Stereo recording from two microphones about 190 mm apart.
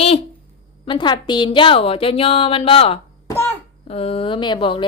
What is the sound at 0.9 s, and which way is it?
Speech, 25° left (ahead or behind).